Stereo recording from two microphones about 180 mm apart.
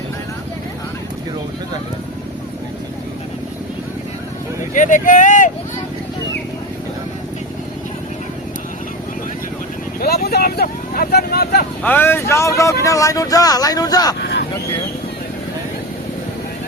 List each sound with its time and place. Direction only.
4.7 s speech: 45° left (ahead or behind)
10.0 s vehicle: 60° left (ahead or behind)
11.8 s speech: 10° left (ahead or behind)
14.2 s vehicle: 65° left (ahead or behind)